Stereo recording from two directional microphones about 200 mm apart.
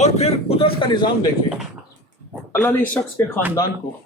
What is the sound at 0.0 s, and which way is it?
Speech, 30° left (ahead or behind).